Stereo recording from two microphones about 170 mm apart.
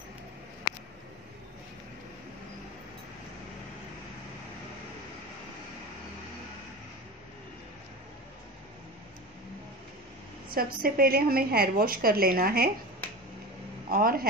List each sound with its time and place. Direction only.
10.5 s a woman's voice: 60° right (ahead or behind)
13.8 s speech: 60° right (ahead or behind)